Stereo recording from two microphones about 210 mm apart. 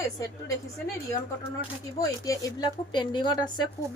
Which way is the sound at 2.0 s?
15° left (ahead or behind).